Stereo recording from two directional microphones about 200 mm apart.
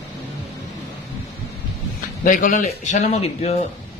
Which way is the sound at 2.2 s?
45° left (ahead or behind).